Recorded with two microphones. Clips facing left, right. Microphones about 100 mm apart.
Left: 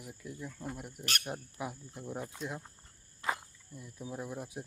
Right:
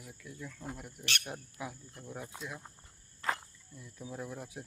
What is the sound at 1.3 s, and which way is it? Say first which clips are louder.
Speech: left 3 dB; 20° left (ahead or behind).